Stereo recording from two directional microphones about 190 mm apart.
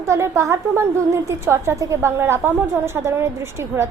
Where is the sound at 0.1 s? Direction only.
15° right (ahead or behind).